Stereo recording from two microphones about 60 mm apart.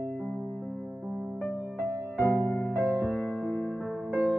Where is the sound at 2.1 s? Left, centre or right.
Left.